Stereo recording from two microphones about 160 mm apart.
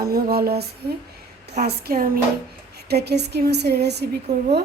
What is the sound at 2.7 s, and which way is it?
A woman's voice, 90° right.